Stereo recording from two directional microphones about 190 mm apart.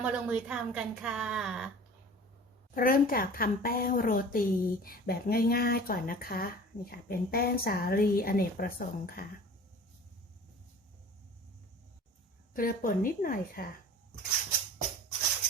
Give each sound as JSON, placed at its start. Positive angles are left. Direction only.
{"t": 0.0, "sound": "a woman's voice", "side_deg": -5}
{"t": 2.7, "sound": "a woman's voice", "side_deg": 50}
{"t": 12.5, "sound": "a woman's voice", "side_deg": 50}